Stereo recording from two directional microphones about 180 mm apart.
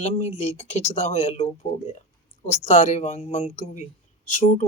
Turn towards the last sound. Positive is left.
turn(degrees=40)  # may be behind; listen again after turning